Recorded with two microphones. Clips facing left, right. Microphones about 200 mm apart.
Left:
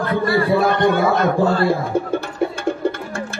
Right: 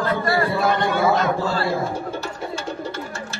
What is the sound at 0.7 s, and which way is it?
A man's voice, 55° left (ahead or behind).